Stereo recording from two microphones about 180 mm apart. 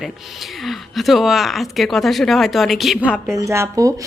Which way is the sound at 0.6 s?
Centre (ahead or behind).